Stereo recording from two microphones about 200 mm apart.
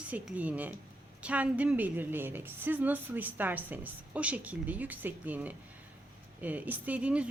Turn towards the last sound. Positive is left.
turn(degrees=-5)  # may be behind; listen again after turning